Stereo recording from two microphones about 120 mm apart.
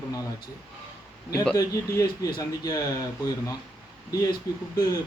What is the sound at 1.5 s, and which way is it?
Speech, 30° left (ahead or behind).